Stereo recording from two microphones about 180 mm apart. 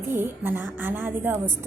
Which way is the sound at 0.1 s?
10° right (ahead or behind).